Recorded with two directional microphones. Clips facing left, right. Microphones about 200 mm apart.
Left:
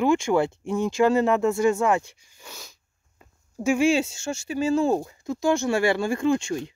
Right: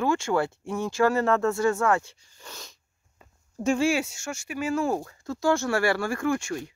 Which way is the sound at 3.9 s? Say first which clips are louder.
Left 4 dB; 25° left (ahead or behind).